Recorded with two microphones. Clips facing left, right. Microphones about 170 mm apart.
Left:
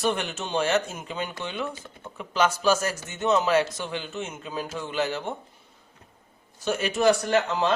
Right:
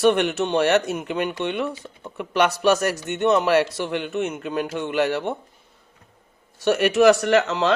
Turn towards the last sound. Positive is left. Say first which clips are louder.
# right 4 dB
turn(degrees=-80)